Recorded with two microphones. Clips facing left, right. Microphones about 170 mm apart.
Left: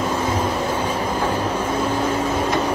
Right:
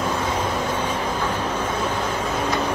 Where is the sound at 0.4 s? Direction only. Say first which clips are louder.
Left 2 dB; 10° left (ahead or behind).